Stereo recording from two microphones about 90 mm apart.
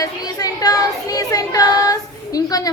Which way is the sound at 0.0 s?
45° left (ahead or behind).